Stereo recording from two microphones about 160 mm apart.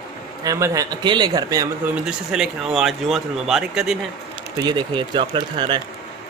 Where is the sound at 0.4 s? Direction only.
20° right (ahead or behind).